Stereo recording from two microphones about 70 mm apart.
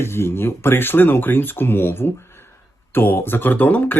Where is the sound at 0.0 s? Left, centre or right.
Left.